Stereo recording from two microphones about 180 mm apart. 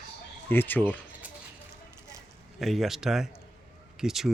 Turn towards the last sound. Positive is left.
turn(degrees=0)  # may be behind; listen again after turning